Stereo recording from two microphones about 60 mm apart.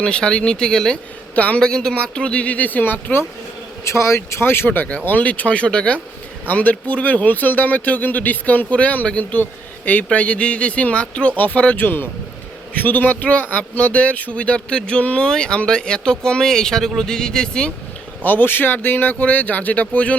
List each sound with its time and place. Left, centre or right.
0.0 s speech: centre
1.4 s speech: left
1.6 s speech: centre; by 3.2 s left
3.8 s speech: left; by 17.7 s centre
18.2 s speech: left